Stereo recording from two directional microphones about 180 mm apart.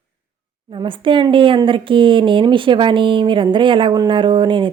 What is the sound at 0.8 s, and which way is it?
A woman's voice, 30° right (ahead or behind).